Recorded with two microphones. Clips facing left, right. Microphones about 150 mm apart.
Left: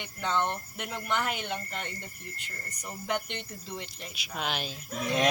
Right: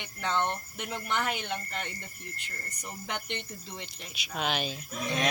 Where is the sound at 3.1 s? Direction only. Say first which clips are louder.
Left 4 dB; 5° left (ahead or behind).